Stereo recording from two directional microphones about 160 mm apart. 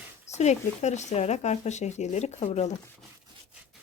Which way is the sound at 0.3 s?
45° left (ahead or behind).